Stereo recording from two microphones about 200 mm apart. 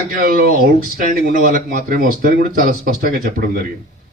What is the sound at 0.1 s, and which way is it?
A man's voice, 50° right (ahead or behind).